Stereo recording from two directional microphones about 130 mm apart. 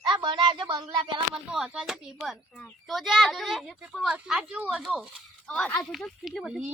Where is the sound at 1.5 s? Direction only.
5° right (ahead or behind).